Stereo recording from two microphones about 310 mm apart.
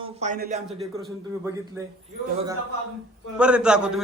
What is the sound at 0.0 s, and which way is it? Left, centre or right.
Speech, right.